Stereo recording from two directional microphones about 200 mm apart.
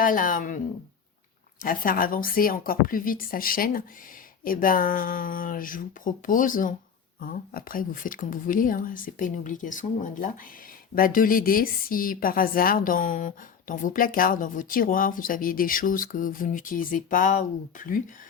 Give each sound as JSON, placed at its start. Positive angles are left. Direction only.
{"t": 0.0, "sound": "a woman's voice", "side_deg": 45}
{"t": 1.6, "sound": "a woman's voice", "side_deg": 45}